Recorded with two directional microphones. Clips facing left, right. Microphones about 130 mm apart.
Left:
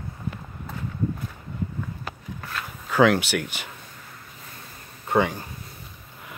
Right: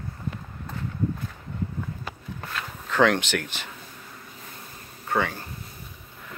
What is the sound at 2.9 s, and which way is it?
Speech, 5° left (ahead or behind).